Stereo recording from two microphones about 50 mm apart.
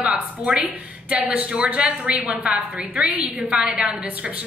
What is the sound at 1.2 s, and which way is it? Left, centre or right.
A woman's voice, right.